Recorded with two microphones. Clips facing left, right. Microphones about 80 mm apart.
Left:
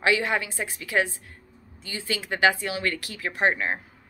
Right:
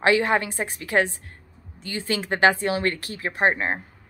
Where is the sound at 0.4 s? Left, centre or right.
Right.